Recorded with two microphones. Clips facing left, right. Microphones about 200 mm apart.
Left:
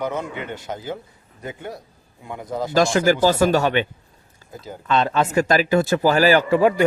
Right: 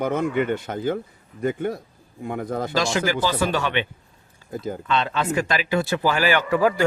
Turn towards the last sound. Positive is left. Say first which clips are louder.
# left 3 dB
turn(degrees=25)  # may be behind; listen again after turning